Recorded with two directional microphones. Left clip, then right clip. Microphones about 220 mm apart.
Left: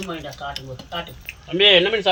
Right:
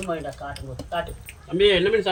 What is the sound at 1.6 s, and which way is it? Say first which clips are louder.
Speech: left 4 dB; 15° left (ahead or behind).